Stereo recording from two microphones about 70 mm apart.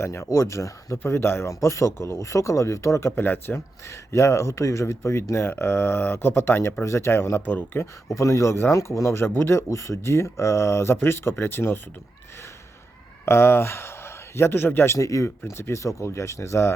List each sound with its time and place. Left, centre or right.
0.0 s speech: left
3.1 s speech: left
3.8 s speech: left
8.0 s speech: left
13.2 s speech: left
14.9 s speech: left